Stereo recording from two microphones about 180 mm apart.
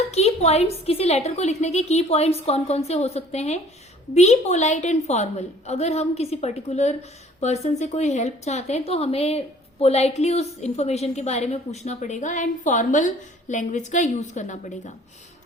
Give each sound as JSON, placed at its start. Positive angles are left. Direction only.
{"t": 0.1, "sound": "a woman's voice", "side_deg": 35}